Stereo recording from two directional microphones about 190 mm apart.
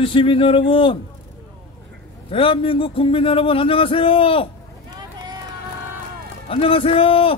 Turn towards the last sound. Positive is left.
turn(degrees=30)  # may be behind; listen again after turning